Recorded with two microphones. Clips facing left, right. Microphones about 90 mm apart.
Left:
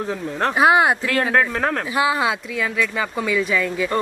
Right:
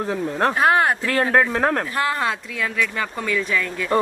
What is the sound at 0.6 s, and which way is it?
Speech, 10° left (ahead or behind).